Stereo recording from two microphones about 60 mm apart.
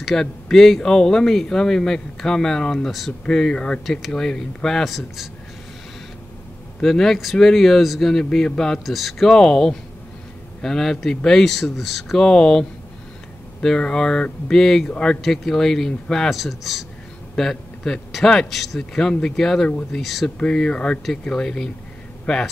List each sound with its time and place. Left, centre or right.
0.0 s speech: centre
3.8 s speech: centre
6.8 s speech: centre
12.2 s speech: centre
15.2 s speech: centre
20.2 s speech: centre